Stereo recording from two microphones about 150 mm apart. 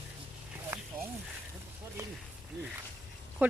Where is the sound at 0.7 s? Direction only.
15° right (ahead or behind).